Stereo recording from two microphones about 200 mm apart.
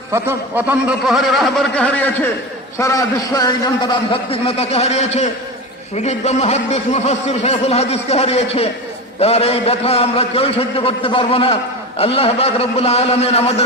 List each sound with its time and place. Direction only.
0.1 s a man's voice: 10° right (ahead or behind); by 3.5 s 20° left (ahead or behind)
4.1 s a man's voice: 30° left (ahead or behind)